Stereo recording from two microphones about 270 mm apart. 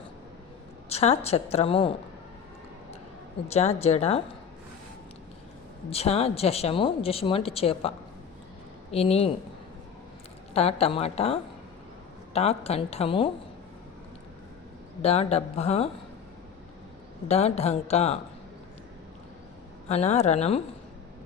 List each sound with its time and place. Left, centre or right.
0.9 s speech: left
3.5 s speech: left
5.9 s speech: left
10.5 s speech: left
15.0 s speech: left
17.2 s speech: left
19.9 s speech: left